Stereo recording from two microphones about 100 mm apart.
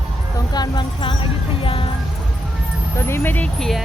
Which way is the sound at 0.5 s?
45° left (ahead or behind).